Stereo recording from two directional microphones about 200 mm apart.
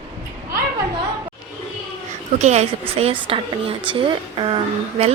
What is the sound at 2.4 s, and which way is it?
A woman's voice, 35° right (ahead or behind).